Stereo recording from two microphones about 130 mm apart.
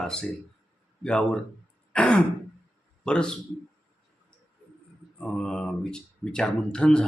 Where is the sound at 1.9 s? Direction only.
5° left (ahead or behind).